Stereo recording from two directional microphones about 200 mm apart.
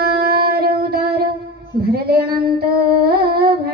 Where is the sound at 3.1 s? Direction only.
50° right (ahead or behind).